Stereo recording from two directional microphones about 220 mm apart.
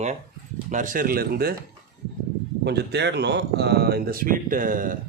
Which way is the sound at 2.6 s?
50° right (ahead or behind).